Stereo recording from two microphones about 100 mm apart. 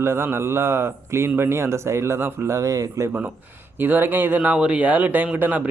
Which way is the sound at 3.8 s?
20° right (ahead or behind).